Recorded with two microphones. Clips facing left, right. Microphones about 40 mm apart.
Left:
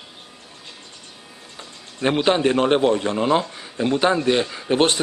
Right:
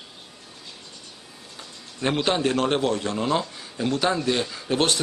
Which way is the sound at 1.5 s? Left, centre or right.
Centre.